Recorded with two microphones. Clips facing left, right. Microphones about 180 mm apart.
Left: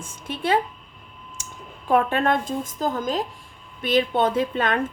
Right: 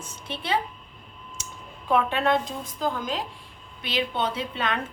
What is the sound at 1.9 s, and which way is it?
A woman's voice, 50° left (ahead or behind).